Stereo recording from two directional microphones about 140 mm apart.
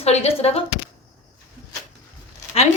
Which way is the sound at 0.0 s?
50° left (ahead or behind).